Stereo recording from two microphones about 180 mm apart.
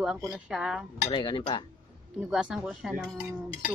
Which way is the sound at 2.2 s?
5° right (ahead or behind).